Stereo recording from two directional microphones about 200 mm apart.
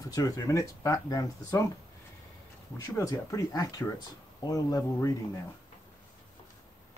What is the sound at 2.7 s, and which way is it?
Speech, 15° left (ahead or behind).